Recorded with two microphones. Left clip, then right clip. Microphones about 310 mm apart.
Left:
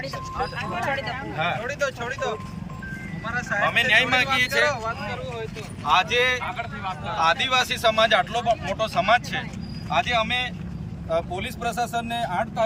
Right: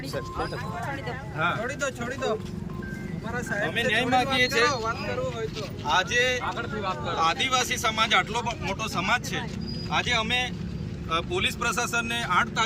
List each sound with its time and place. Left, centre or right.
1.0 s speech: centre
4.7 s speech: centre
5.9 s speech: centre